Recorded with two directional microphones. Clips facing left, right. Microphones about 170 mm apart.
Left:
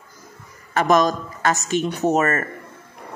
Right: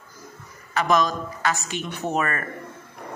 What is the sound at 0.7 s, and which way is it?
Speech, 45° left (ahead or behind).